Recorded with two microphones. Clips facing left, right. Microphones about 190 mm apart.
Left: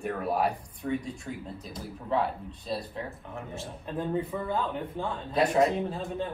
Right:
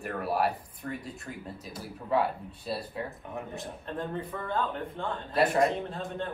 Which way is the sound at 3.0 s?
15° right (ahead or behind).